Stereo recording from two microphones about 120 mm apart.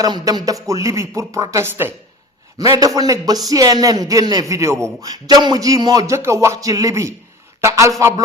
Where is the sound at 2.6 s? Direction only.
30° right (ahead or behind).